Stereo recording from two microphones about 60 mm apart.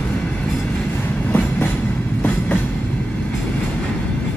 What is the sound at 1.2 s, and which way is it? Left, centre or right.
Train, left.